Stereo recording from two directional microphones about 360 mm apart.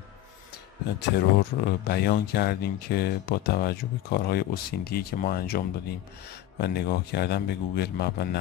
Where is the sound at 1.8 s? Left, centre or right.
Left.